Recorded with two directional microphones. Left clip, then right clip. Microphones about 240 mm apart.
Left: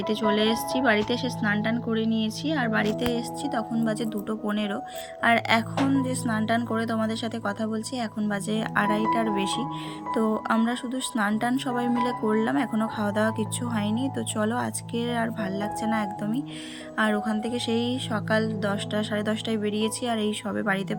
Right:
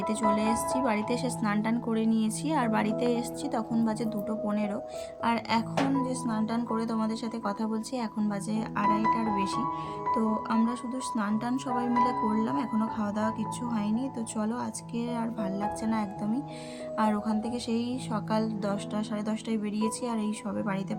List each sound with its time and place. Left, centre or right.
0.1 s a woman's voice: centre